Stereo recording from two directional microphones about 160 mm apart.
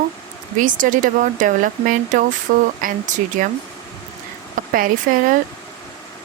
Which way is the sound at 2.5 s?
65° right (ahead or behind).